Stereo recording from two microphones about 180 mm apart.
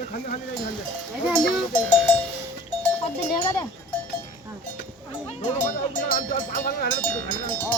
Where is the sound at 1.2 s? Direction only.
Centre (ahead or behind).